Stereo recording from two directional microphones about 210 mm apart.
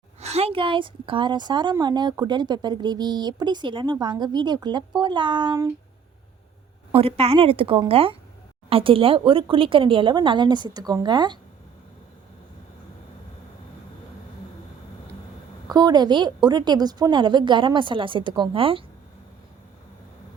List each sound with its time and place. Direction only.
0.2 s speech: 30° right (ahead or behind)
6.9 s speech: 30° right (ahead or behind)
15.7 s speech: 20° right (ahead or behind)